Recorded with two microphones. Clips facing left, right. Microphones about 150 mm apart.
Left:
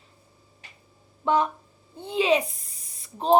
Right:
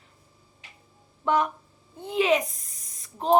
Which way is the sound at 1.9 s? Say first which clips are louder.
Even; 25° left (ahead or behind).